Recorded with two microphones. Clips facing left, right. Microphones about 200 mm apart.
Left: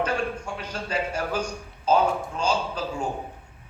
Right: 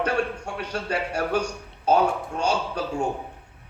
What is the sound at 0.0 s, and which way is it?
A man's voice, 65° right (ahead or behind).